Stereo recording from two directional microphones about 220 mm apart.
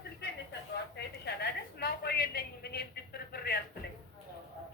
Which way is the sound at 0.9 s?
50° left (ahead or behind).